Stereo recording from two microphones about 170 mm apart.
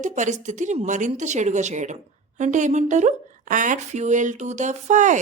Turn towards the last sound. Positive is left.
turn(degrees=-45)  # may be behind; listen again after turning